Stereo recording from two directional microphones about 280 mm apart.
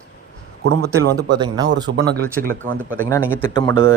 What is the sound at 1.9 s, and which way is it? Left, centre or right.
Speech, right.